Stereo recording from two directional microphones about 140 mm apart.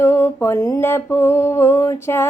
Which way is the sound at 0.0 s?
15° left (ahead or behind).